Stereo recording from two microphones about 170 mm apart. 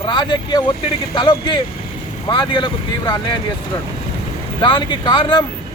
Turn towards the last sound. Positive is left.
turn(degrees=25)  # may be behind; listen again after turning